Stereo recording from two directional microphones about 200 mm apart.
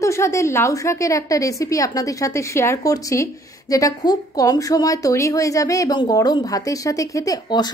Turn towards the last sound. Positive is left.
turn(degrees=20)  # may be behind; listen again after turning